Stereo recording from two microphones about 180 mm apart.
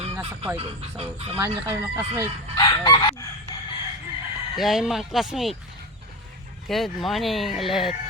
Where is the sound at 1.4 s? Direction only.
20° right (ahead or behind).